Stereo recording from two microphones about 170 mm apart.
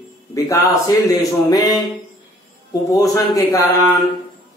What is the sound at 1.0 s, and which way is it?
Speech, 20° left (ahead or behind).